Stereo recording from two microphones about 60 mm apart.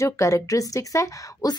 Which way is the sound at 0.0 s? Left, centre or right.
Left.